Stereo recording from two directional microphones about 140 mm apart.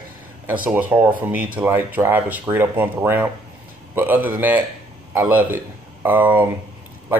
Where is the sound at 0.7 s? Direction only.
10° right (ahead or behind).